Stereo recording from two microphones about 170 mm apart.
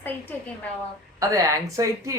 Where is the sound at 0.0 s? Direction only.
10° left (ahead or behind).